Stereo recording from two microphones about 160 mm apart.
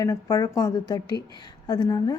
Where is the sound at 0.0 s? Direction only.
20° left (ahead or behind).